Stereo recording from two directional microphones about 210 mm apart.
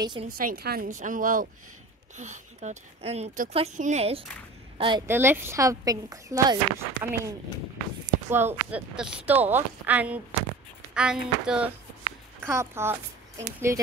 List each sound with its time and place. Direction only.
0.0 s a woman's voice: 20° right (ahead or behind)
0.3 s a woman's voice: 45° right (ahead or behind); by 5.0 s 25° right (ahead or behind)
5.0 s a woman's voice: 10° right (ahead or behind)